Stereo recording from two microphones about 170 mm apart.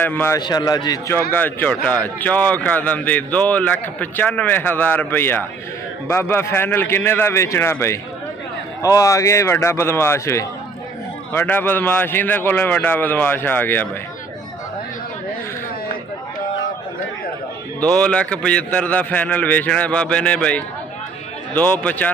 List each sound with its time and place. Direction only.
0.0 s a man's voice: 10° left (ahead or behind)
0.4 s a man's voice: 25° left (ahead or behind)
17.7 s a man's voice: 5° left (ahead or behind)